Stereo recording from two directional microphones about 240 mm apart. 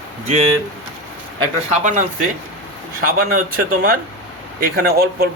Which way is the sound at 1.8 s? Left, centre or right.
Right.